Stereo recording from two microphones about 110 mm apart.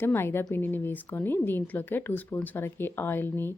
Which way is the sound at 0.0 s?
20° left (ahead or behind).